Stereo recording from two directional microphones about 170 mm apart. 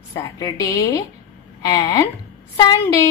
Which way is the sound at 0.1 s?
20° left (ahead or behind).